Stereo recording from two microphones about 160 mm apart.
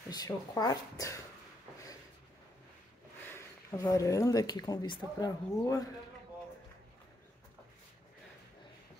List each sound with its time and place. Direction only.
0.1 s speech: 25° left (ahead or behind)
3.3 s speech: 20° left (ahead or behind)